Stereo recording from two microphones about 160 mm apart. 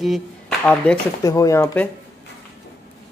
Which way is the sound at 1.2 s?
20° left (ahead or behind).